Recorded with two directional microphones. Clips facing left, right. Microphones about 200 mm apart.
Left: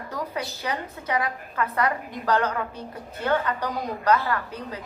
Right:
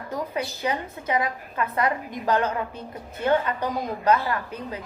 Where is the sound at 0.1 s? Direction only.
25° right (ahead or behind).